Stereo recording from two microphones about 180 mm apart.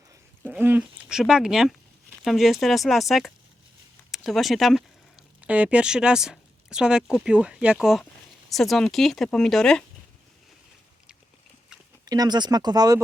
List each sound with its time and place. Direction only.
0.4 s speech: 10° right (ahead or behind)
12.0 s speech: 20° right (ahead or behind)